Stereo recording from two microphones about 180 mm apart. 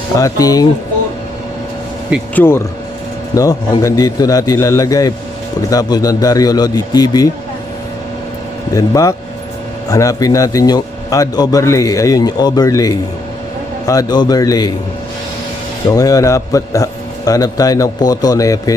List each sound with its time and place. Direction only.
0.2 s a man's voice: 20° left (ahead or behind)
2.3 s a man's voice: 10° left (ahead or behind)
8.7 s a man's voice: 20° left (ahead or behind)
15.9 s a man's voice: 20° left (ahead or behind)